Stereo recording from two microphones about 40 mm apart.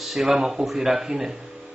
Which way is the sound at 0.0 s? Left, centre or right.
Centre.